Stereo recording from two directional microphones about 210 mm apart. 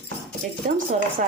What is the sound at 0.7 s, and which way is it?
Speech, 40° right (ahead or behind).